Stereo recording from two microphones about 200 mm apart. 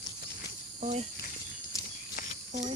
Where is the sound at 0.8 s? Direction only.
30° right (ahead or behind).